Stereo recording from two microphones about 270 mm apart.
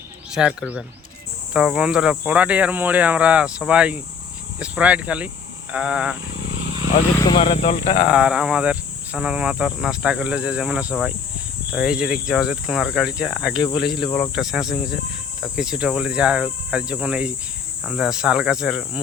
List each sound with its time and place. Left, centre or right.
0.3 s cricket: centre
7.3 s speech: left
8.0 s cricket: centre